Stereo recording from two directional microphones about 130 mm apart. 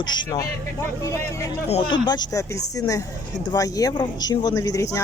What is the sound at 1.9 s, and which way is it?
Speech, 35° left (ahead or behind).